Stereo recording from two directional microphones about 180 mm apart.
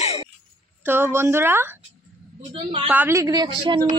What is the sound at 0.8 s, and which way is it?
Speech, 10° right (ahead or behind).